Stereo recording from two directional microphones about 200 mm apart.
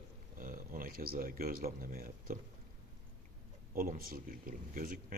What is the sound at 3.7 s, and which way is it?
Speech, 45° right (ahead or behind).